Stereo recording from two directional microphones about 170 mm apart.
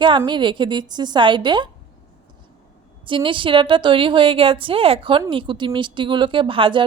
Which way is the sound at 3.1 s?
30° right (ahead or behind).